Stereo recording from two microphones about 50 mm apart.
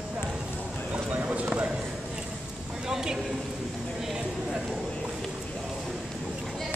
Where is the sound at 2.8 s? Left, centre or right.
Centre.